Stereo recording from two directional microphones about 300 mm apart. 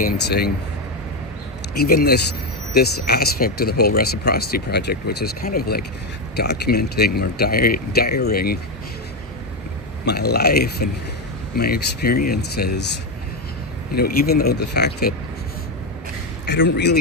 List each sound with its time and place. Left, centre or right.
0.0 s speech: left
1.8 s speech: left
10.1 s speech: left
13.9 s speech: left
16.5 s speech: left